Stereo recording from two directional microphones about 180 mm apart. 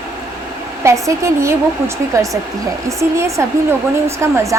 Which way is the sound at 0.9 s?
15° right (ahead or behind).